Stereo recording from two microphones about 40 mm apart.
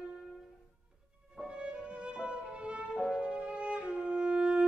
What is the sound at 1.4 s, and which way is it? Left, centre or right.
Music, right.